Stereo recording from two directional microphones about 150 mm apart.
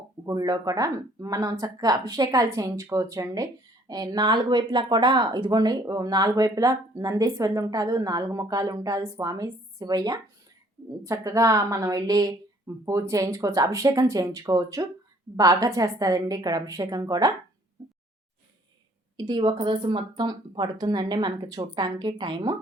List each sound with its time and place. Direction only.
0.3 s speech: 25° right (ahead or behind)
19.1 s speech: 30° right (ahead or behind)